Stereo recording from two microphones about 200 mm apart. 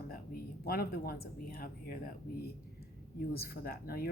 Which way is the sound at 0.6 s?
50° left (ahead or behind).